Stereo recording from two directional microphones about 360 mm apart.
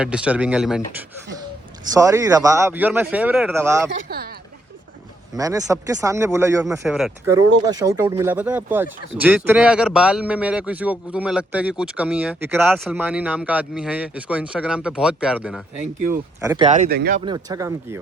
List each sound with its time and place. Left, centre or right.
0.0 s speech: centre
1.9 s speech: centre
3.8 s speech: right
5.3 s speech: centre